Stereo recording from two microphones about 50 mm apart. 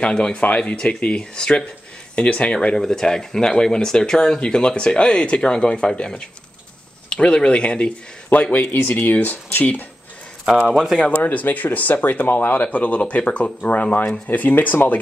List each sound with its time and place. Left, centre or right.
0.0 s speech: left
2.8 s speech: centre; by 9.8 s left
10.7 s speech: centre
11.1 s speech: left
12.6 s speech: left
14.0 s speech: centre
14.3 s speech: left